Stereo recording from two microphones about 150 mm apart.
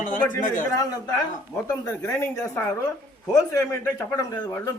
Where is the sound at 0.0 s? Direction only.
60° left (ahead or behind).